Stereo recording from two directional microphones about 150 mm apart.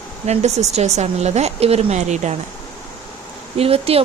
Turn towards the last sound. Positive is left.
turn(degrees=-40)  # may be behind; listen again after turning